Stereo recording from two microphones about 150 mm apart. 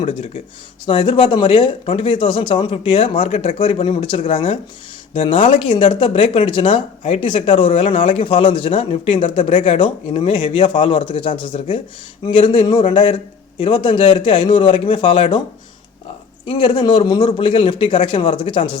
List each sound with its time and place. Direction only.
0.0 s speech: 40° left (ahead or behind)
16.5 s speech: 35° left (ahead or behind)